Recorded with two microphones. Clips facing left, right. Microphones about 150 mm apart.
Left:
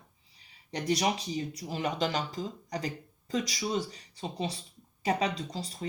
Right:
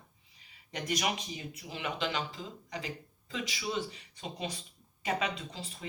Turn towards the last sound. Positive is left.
turn(degrees=35)  # may be behind; listen again after turning